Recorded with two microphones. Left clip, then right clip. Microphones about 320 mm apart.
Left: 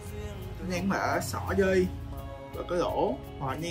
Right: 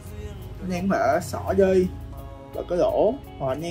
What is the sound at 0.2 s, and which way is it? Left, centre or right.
Speech, centre.